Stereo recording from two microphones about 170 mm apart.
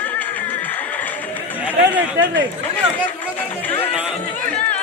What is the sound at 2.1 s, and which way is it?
Speech, 90° right.